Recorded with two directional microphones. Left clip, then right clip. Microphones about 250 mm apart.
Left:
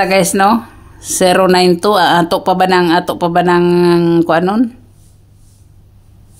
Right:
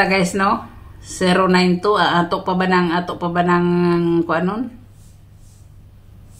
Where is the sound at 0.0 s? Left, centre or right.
Left.